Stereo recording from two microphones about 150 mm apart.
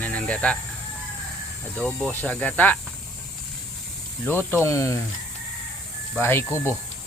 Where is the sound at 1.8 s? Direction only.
5° left (ahead or behind).